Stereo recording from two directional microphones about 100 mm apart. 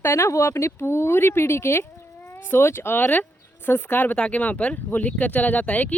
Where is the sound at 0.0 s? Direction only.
30° left (ahead or behind).